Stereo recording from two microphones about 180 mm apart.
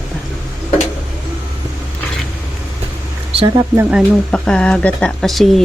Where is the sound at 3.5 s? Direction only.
15° right (ahead or behind).